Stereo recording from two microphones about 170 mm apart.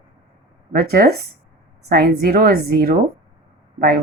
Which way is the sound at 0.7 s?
65° right (ahead or behind).